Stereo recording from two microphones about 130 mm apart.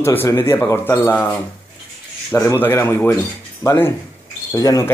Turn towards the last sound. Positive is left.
turn(degrees=25)  # may be behind; listen again after turning